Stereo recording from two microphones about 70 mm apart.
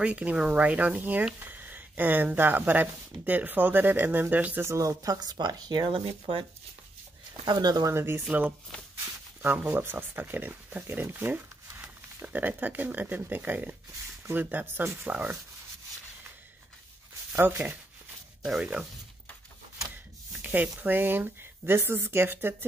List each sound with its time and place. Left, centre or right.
0.0 s speech: centre
4.6 s speech: right
7.4 s speech: right
7.9 s speech: right
8.3 s speech: right
17.4 s speech: right
18.4 s speech: centre
20.3 s speech: right